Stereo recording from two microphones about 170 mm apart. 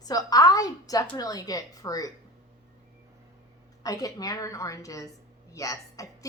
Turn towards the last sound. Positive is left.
turn(degrees=20)  # may be behind; listen again after turning